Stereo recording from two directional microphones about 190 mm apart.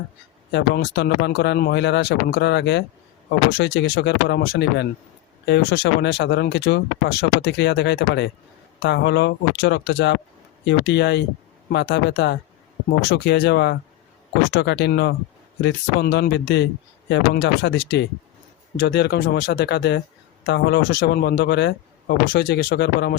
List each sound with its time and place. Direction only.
0.5 s speech: 60° left (ahead or behind)
3.6 s speech: 80° left; by 23.1 s 60° left (ahead or behind)